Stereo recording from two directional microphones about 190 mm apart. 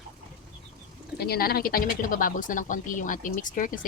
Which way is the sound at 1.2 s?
55° left (ahead or behind).